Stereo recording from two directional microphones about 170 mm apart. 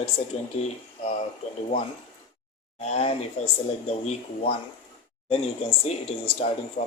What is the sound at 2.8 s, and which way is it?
Speech, 40° left (ahead or behind).